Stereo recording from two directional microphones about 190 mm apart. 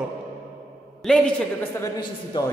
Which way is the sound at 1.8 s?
20° left (ahead or behind).